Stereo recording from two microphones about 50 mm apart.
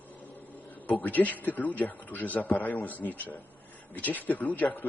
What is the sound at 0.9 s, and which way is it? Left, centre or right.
A man's voice, left.